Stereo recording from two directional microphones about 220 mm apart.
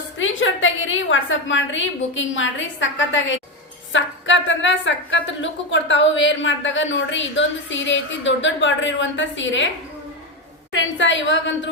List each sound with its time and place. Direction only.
0.2 s a woman's voice: 60° left (ahead or behind)
10.7 s a woman's voice: 55° left (ahead or behind)